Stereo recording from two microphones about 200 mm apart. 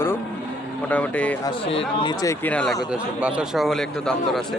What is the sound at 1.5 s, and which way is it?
Speech, 30° left (ahead or behind).